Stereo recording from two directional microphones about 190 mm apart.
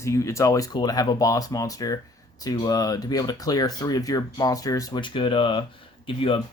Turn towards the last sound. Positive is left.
turn(degrees=25)  # may be behind; listen again after turning